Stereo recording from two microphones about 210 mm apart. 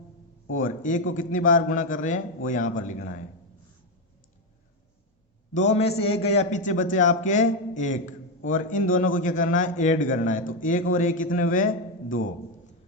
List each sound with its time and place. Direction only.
0.6 s a man's voice: 35° left (ahead or behind)
5.5 s a man's voice: 30° left (ahead or behind)